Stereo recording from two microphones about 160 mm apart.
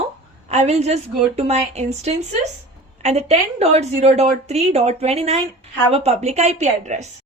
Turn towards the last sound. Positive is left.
turn(degrees=-45)  # may be behind; listen again after turning